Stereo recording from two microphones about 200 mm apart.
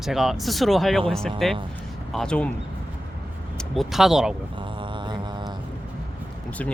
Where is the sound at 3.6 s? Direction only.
Centre (ahead or behind).